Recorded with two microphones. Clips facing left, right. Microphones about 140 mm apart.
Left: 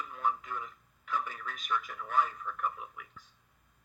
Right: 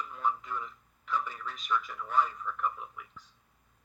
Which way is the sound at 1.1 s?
50° left (ahead or behind).